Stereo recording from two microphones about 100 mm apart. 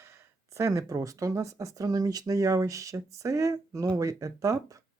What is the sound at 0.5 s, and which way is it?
Speech, 30° right (ahead or behind).